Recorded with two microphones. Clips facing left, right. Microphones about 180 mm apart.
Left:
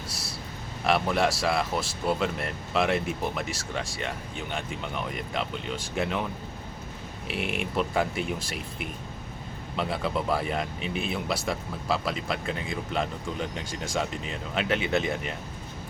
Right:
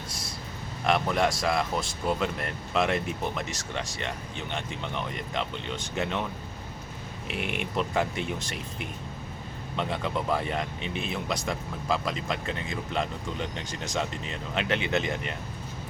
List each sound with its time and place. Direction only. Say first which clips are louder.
0.9 s speech: left 1 dB; 5° left (ahead or behind)
4.5 s speech: even; 5° left (ahead or behind)
7.3 s speech: left 2 dB; 35° left (ahead or behind)
7.8 s speech: left 1 dB; 5° left (ahead or behind)
9.7 s speech: left 1 dB; 5° left (ahead or behind)